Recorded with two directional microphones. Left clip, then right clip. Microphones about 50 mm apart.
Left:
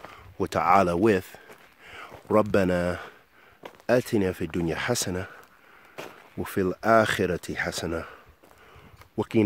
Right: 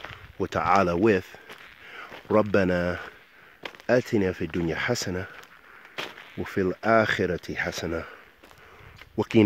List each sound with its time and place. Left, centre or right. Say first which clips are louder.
0.4 s speech: left 1 dB; left
0.7 s speech: left 1 dB; left
2.5 s speech: even; left
4.5 s speech: right 1 dB; left
5.9 s a sound: right 3 dB; centre
6.4 s speech: even; left
9.2 s speech: right 2 dB; centre